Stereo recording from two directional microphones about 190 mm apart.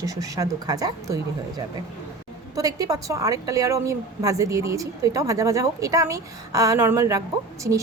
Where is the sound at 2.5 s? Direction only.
20° right (ahead or behind).